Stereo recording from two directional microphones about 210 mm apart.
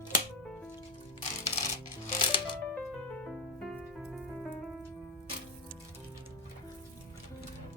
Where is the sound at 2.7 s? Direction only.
5° left (ahead or behind).